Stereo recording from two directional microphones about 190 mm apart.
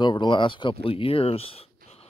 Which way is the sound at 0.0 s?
25° left (ahead or behind).